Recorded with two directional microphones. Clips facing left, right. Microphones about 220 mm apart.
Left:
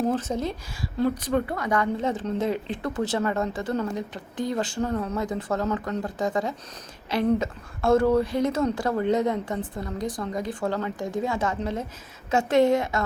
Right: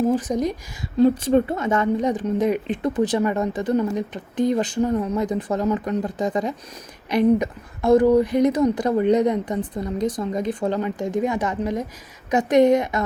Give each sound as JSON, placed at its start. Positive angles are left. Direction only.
{"t": 0.1, "sound": "a woman's voice", "side_deg": -15}